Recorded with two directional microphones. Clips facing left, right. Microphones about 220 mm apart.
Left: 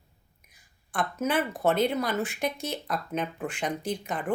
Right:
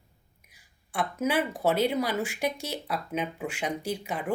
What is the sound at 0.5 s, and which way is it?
Speech, 10° right (ahead or behind).